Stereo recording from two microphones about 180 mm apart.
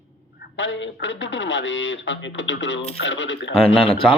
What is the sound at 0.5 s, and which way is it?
Speech, 90° left.